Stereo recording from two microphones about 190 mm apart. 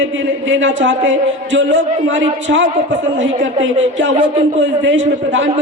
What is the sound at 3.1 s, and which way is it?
A woman's voice, 80° right.